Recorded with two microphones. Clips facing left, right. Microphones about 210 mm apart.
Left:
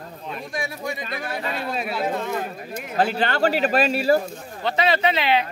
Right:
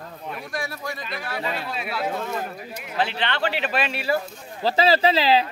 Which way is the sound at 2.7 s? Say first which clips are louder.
Left 5 dB; 50° left (ahead or behind).